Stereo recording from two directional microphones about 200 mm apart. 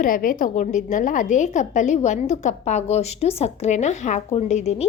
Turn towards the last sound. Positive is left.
turn(degrees=35)  # may be behind; listen again after turning